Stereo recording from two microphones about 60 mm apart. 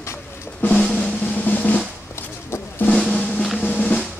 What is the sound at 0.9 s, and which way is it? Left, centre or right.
Drum roll, left.